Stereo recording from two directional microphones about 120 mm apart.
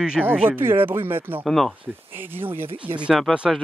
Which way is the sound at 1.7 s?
15° right (ahead or behind).